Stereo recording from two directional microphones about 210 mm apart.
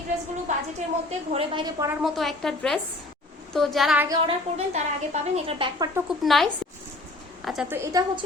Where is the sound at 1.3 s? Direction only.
25° right (ahead or behind).